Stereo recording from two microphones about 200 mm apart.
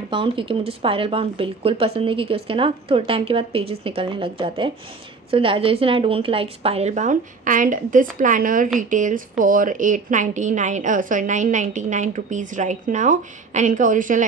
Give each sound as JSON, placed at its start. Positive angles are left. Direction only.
{"t": 0.1, "sound": "a woman's voice", "side_deg": -25}